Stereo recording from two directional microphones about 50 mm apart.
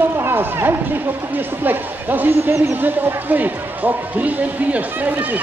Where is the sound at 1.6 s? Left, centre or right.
Right.